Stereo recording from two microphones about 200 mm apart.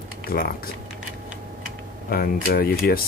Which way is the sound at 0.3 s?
50° left (ahead or behind).